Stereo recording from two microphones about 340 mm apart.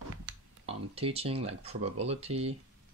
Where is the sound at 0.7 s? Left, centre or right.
Centre.